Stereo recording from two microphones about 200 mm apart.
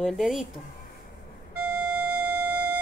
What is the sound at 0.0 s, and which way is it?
Speech, centre (ahead or behind).